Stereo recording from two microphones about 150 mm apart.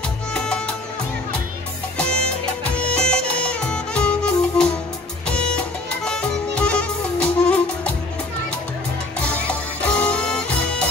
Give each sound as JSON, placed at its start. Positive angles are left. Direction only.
{"t": 0.3, "sound": "music", "side_deg": 5}
{"t": 2.0, "sound": "music", "side_deg": 5}
{"t": 9.2, "sound": "music", "side_deg": 10}